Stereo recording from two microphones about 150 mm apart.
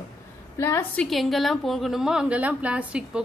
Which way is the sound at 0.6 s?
15° left (ahead or behind).